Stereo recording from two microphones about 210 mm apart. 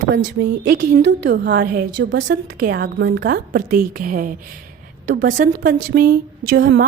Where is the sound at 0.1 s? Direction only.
55° right (ahead or behind).